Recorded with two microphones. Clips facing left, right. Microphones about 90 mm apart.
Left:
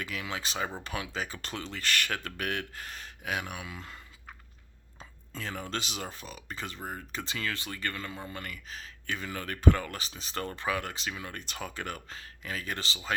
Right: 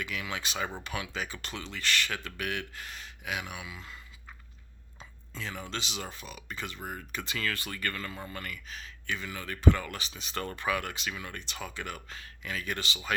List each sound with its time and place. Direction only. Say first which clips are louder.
0.0 s speech: even; 35° left (ahead or behind)